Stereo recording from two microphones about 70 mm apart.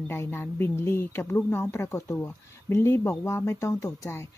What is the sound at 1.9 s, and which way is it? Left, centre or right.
Speech, left.